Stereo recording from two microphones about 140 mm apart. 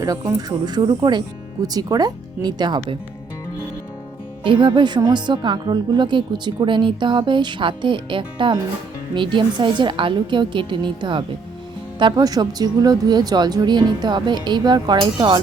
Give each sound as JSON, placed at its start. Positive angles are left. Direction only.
{"t": 0.0, "sound": "speech", "side_deg": -25}
{"t": 4.4, "sound": "speech", "side_deg": -35}